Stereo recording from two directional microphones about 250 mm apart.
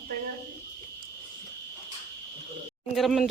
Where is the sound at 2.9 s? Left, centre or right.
Centre.